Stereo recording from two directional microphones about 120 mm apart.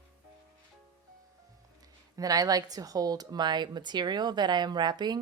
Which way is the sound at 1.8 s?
30° right (ahead or behind).